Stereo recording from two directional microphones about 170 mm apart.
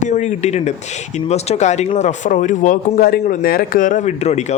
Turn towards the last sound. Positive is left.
turn(degrees=40)  # may be behind; listen again after turning